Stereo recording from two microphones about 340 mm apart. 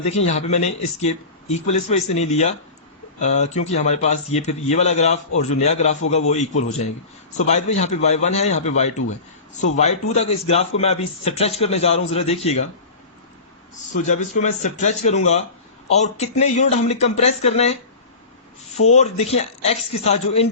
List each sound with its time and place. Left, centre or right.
0.0 s speech: centre
7.3 s a man's voice: centre
13.9 s speech: left
18.9 s a man's voice: centre